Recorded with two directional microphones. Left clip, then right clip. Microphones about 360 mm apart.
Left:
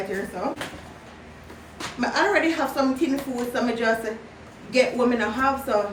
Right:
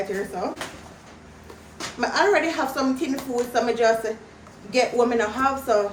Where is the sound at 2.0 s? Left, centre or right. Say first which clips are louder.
Right 1 dB; centre.